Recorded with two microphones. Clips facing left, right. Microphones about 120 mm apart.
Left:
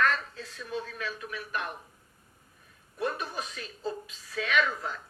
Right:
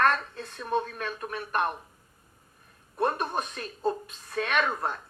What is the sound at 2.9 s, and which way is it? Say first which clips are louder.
A man's voice: right 5 dB; 50° right (ahead or behind).